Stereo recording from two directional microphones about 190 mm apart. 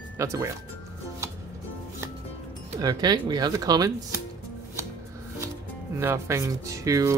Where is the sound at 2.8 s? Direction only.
20° right (ahead or behind).